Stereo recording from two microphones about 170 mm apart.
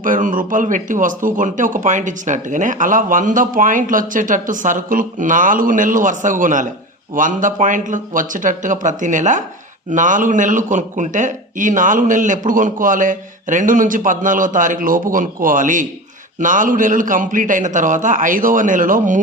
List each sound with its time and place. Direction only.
0.0 s a man's voice: 50° right (ahead or behind)